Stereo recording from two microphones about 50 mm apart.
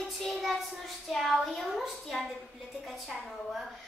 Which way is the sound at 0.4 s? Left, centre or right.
Centre.